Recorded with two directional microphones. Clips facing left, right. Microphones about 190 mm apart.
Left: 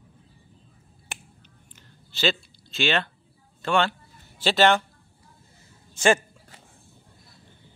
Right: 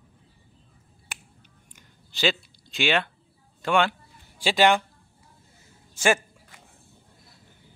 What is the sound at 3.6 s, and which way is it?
A man's voice, 15° right (ahead or behind).